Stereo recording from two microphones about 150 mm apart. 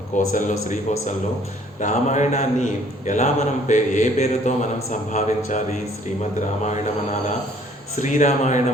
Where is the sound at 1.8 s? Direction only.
50° left (ahead or behind).